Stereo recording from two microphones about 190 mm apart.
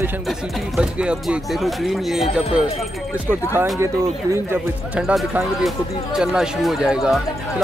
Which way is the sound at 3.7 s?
15° right (ahead or behind).